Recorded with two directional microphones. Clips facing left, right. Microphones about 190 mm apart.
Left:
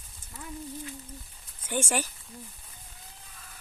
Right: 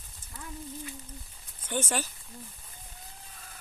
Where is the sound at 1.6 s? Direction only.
10° left (ahead or behind).